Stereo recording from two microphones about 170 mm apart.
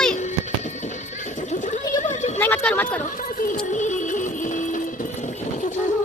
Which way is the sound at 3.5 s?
45° left (ahead or behind).